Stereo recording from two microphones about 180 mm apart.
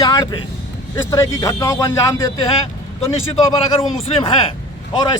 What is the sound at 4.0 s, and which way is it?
Speech, 30° left (ahead or behind).